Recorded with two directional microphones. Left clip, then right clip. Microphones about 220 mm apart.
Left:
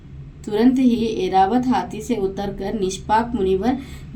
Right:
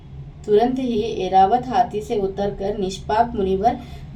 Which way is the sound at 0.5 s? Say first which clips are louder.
Even; 40° left (ahead or behind).